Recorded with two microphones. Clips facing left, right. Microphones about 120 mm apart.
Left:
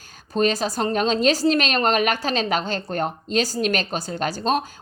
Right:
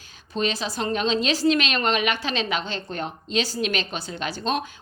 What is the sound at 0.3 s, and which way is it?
A woman's voice, 45° left (ahead or behind).